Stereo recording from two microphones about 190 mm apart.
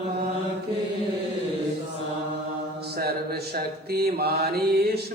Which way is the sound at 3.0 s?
55° right (ahead or behind).